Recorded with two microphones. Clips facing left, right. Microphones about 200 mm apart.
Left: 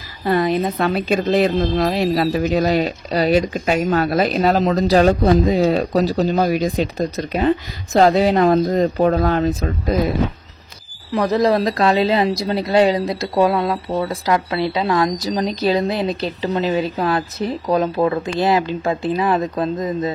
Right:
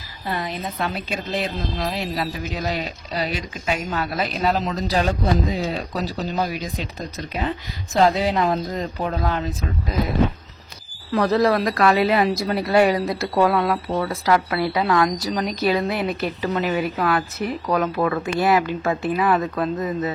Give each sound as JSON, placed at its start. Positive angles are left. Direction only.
{"t": 0.3, "sound": "a woman's voice", "side_deg": 60}
{"t": 11.1, "sound": "speech", "side_deg": 15}